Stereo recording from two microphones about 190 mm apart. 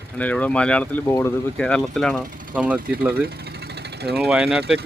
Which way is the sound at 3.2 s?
60° right (ahead or behind).